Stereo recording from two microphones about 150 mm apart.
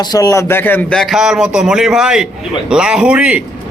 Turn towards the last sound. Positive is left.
turn(degrees=-10)  # may be behind; listen again after turning